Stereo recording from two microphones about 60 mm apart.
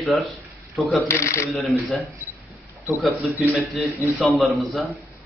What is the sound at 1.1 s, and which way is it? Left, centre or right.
Speech, left.